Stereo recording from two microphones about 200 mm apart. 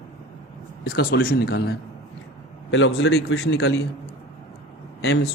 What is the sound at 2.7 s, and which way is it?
Speech, 80° left.